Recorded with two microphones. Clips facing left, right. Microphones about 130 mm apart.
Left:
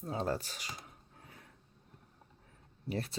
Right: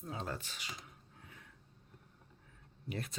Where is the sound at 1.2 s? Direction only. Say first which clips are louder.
Left 2 dB; 35° left (ahead or behind).